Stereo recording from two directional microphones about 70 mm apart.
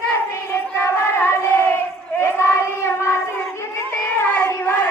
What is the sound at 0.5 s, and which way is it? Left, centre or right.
Crowd, left.